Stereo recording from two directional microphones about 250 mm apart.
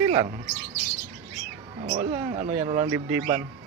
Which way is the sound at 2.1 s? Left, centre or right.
Right.